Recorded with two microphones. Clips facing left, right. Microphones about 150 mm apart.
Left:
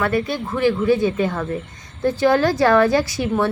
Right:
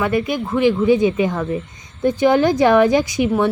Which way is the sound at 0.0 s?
15° right (ahead or behind).